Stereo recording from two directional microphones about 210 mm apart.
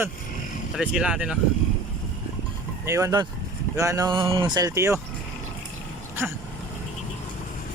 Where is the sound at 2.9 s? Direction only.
15° right (ahead or behind).